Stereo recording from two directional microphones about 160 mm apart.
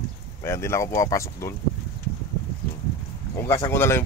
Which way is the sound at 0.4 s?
15° left (ahead or behind).